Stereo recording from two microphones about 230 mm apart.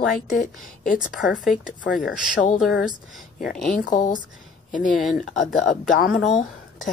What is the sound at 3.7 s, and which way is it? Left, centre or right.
Speech, left.